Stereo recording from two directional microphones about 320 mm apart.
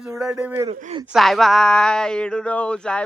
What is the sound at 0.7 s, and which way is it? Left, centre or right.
Speech, centre.